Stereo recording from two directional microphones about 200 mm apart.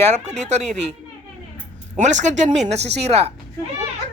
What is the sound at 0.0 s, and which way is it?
Speech, 35° right (ahead or behind).